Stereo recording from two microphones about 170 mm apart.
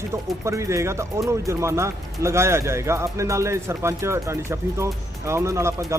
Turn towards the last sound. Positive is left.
turn(degrees=-15)  # may be behind; listen again after turning